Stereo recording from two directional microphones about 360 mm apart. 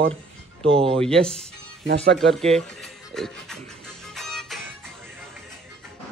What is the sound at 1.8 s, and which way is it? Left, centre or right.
Speech, right.